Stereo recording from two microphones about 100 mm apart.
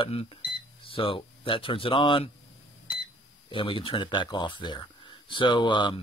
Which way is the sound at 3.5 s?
60° left (ahead or behind).